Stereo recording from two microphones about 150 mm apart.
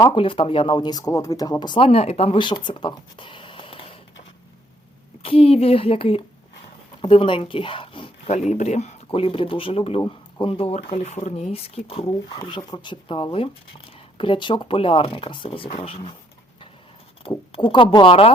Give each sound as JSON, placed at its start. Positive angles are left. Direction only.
{"t": 0.0, "sound": "speech", "side_deg": 30}
{"t": 5.2, "sound": "speech", "side_deg": 40}
{"t": 8.4, "sound": "speech", "side_deg": 50}
{"t": 9.0, "sound": "speech", "side_deg": 35}
{"t": 17.2, "sound": "speech", "side_deg": 35}